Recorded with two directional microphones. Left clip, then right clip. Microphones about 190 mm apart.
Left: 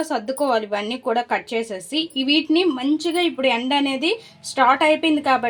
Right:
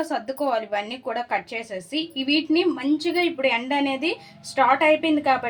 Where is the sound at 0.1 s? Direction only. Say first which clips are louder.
Left 4 dB; 40° left (ahead or behind).